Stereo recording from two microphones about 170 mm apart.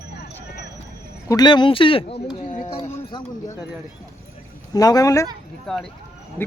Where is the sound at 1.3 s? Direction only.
25° left (ahead or behind).